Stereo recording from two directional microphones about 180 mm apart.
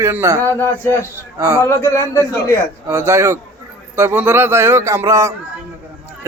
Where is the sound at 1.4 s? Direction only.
15° right (ahead or behind).